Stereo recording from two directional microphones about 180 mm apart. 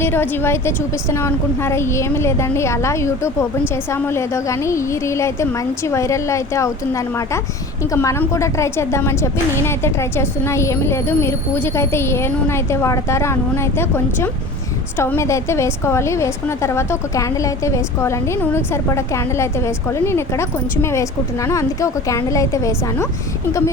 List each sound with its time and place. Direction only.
0.0 s a woman's voice: 10° left (ahead or behind)